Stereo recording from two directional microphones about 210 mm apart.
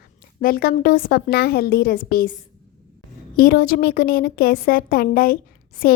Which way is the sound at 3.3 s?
45° left (ahead or behind).